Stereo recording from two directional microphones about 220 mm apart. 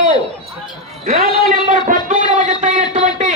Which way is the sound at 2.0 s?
35° right (ahead or behind).